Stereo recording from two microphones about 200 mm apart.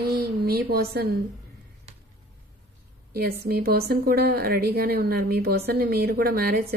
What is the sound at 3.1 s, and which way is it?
A woman's voice, 50° right (ahead or behind).